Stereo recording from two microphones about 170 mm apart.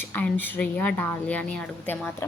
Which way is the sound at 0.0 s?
10° left (ahead or behind).